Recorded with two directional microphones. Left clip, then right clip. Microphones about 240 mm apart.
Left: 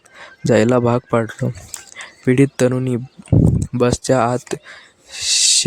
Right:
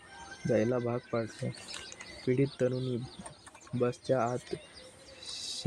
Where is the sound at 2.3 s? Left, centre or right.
Left.